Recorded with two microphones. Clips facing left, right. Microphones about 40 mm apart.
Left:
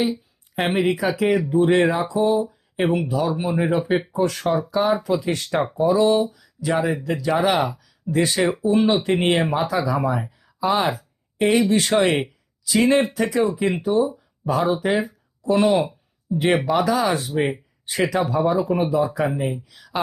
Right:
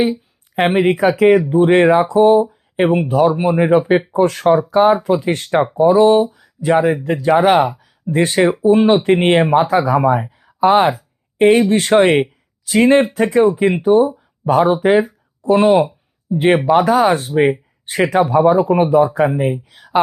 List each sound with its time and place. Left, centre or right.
0.0 s speech: right
7.6 s speech: right